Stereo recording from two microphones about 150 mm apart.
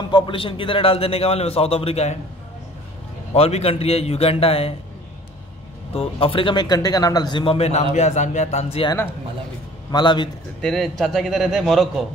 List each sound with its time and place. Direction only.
0.1 s speech: 35° left (ahead or behind)
3.3 s speech: 45° left (ahead or behind)
5.9 s speech: 40° left (ahead or behind)
9.8 s speech: 30° left (ahead or behind)
10.6 s a man's voice: 5° left (ahead or behind)